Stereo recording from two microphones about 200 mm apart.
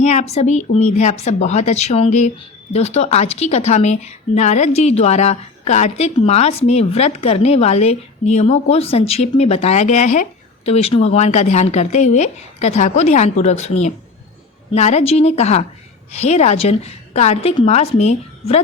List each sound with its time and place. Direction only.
0.0 s a woman's voice: 35° left (ahead or behind)